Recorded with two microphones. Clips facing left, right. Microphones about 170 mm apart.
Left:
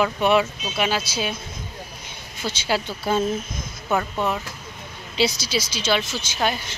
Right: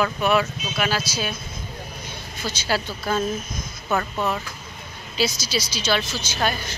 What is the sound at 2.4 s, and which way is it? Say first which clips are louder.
Speech: left 1 dB; 20° left (ahead or behind).